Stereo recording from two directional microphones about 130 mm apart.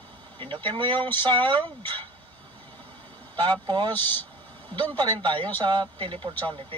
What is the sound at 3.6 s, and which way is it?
Speech, 35° right (ahead or behind).